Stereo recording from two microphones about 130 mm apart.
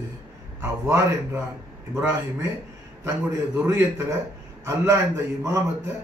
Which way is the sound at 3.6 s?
20° right (ahead or behind).